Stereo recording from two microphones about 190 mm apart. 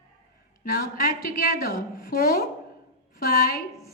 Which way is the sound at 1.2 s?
50° left (ahead or behind).